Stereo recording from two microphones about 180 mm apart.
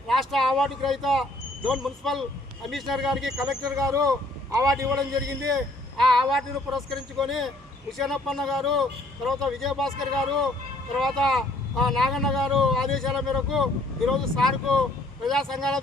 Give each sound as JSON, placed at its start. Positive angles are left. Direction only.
{"t": 0.1, "sound": "speech", "side_deg": 0}
{"t": 3.8, "sound": "a man's voice", "side_deg": -20}
{"t": 6.1, "sound": "speech", "side_deg": 0}